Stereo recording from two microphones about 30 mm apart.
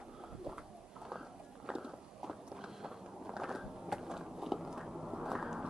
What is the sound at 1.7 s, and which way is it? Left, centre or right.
Walk, right.